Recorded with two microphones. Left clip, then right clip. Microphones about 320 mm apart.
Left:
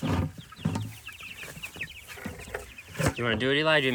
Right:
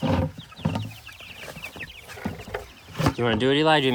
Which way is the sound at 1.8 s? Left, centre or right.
Right.